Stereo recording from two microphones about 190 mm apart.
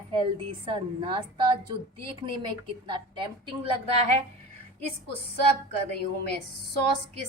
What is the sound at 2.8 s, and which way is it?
Speech, 25° right (ahead or behind).